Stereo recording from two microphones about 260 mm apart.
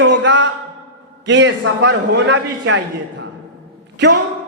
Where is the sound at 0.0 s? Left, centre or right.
Right.